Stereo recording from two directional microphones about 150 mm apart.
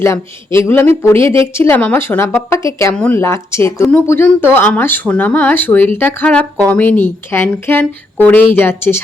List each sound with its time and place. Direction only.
0.0 s speech: 20° left (ahead or behind)